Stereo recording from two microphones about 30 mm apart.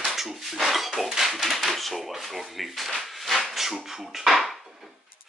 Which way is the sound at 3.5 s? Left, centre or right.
Centre.